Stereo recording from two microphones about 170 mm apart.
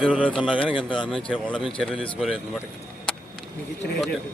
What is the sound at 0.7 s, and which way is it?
Speech, 30° left (ahead or behind).